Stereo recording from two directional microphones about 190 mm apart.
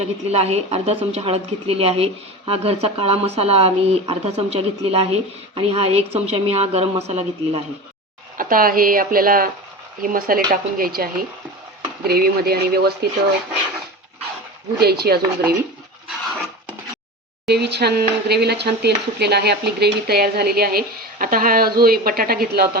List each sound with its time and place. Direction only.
0.3 s speech: 35° right (ahead or behind)
8.4 s speech: 50° right (ahead or behind)
14.8 s speech: 55° right (ahead or behind)
17.4 s speech: 60° right (ahead or behind)